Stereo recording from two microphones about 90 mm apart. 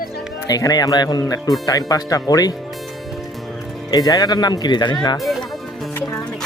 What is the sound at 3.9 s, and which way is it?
Speech, 45° left (ahead or behind).